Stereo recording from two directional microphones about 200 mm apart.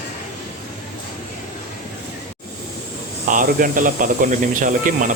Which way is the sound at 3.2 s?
40° right (ahead or behind).